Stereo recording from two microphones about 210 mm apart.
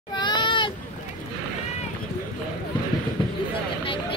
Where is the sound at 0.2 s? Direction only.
20° left (ahead or behind).